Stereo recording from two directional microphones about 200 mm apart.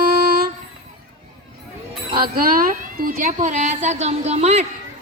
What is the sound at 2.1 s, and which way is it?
A woman's voice, 45° right (ahead or behind).